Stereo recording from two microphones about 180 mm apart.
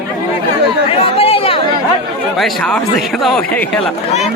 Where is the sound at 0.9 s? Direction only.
30° left (ahead or behind).